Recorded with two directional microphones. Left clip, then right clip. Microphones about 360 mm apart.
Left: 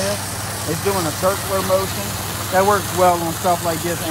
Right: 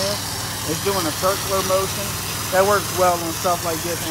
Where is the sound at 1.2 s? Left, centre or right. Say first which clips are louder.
Left 2 dB; left.